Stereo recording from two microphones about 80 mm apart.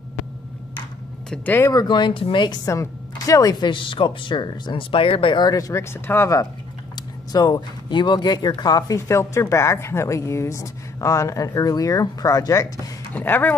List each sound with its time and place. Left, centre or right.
1.7 s speech: left
2.6 s a woman's voice: left
3.5 s speech: left
5.5 s speech: left
7.3 s speech: left
7.9 s speech: left
13.1 s speech: left